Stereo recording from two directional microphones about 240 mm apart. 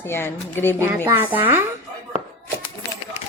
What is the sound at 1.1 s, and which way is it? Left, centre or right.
Speech, centre.